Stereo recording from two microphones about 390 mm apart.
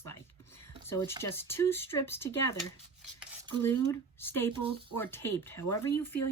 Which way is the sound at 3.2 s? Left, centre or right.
Centre.